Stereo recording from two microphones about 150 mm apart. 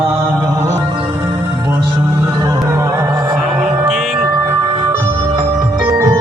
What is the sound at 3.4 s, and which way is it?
Music, centre (ahead or behind).